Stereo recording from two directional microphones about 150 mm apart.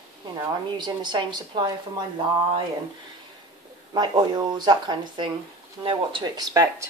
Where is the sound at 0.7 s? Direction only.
30° right (ahead or behind).